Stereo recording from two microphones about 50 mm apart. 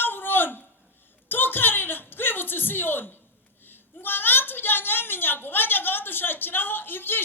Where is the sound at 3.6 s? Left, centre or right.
Left.